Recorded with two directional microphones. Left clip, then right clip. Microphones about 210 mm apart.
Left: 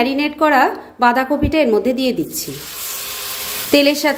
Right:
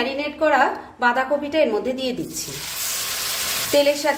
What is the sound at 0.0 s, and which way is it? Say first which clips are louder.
A woman's voice: left 5 dB; 35° left (ahead or behind).